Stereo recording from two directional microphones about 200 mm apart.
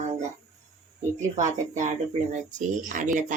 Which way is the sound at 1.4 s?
40° right (ahead or behind).